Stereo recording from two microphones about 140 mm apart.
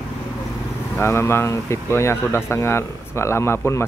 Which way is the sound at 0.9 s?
20° left (ahead or behind).